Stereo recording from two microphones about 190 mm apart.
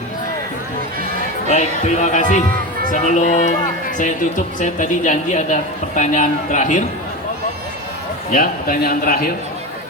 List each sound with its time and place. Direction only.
1.5 s speech: 40° left (ahead or behind)
8.3 s a man's voice: 45° left (ahead or behind)